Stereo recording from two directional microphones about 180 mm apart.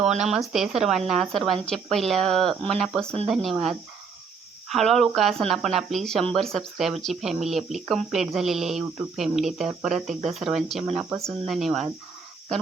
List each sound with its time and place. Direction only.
0.2 s speech: centre (ahead or behind)